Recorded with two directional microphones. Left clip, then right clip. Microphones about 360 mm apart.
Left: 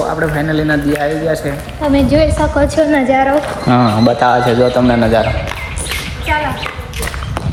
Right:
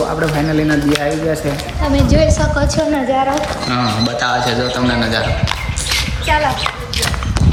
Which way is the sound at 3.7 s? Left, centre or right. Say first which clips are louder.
Left 8 dB; centre.